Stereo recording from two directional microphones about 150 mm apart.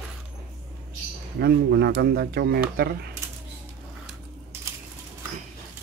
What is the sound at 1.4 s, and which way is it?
Speech, 90° right.